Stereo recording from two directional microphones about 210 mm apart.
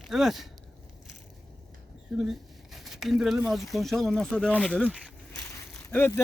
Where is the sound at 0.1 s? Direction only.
Centre (ahead or behind).